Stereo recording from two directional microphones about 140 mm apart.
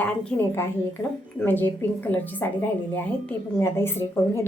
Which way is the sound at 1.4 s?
15° left (ahead or behind).